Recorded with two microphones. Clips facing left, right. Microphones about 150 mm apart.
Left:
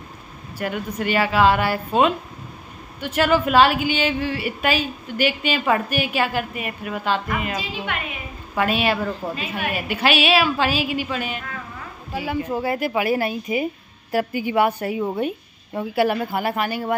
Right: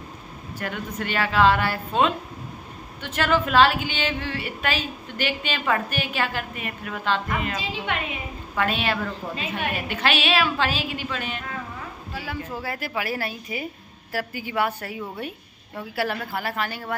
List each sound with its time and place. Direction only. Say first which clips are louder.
0.6 s a woman's voice: left 5 dB; 10° left (ahead or behind)